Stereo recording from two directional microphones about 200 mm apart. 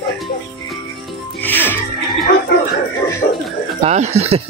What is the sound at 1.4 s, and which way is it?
Music, 10° left (ahead or behind).